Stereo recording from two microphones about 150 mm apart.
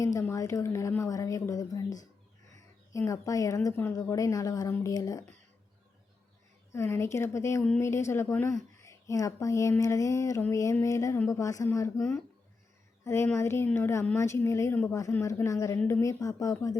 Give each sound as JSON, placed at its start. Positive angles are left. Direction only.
{"t": 0.0, "sound": "speech", "side_deg": 20}
{"t": 6.7, "sound": "a woman's voice", "side_deg": 15}
{"t": 13.1, "sound": "a woman's voice", "side_deg": 15}